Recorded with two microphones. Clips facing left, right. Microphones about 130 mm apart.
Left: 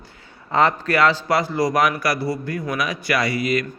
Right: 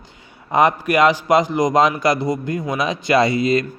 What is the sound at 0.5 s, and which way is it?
A man's voice, 15° right (ahead or behind).